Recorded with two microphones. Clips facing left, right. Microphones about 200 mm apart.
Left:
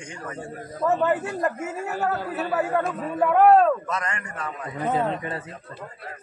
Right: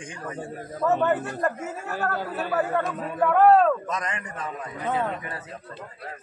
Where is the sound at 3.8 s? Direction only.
20° right (ahead or behind).